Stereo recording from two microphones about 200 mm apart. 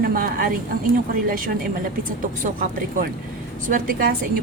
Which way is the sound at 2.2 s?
45° right (ahead or behind).